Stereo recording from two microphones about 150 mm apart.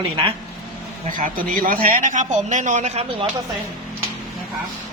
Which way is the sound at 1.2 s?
70° right (ahead or behind).